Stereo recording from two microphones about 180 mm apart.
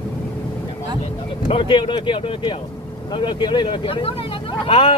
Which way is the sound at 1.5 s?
30° left (ahead or behind).